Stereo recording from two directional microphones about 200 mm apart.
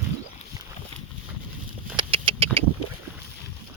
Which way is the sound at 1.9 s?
25° right (ahead or behind).